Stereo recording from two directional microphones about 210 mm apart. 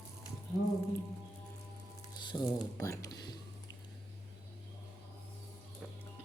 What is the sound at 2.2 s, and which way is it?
Squish, 20° left (ahead or behind).